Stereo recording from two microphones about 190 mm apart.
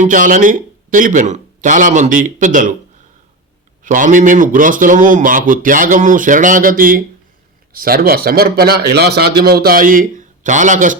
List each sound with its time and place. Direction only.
0.0 s a man's voice: 45° right (ahead or behind)
3.8 s a man's voice: 45° right (ahead or behind)